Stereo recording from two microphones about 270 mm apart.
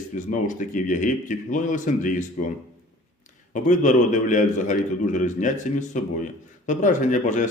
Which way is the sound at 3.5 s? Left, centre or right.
Left.